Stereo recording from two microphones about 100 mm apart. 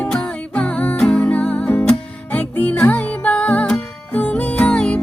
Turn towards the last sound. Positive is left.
turn(degrees=10)  # may be behind; listen again after turning